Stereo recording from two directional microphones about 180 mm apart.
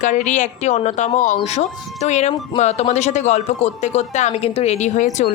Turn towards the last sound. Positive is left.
turn(degrees=40)  # may be behind; listen again after turning